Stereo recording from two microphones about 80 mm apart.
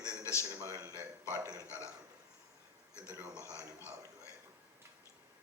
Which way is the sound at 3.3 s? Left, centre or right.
Left.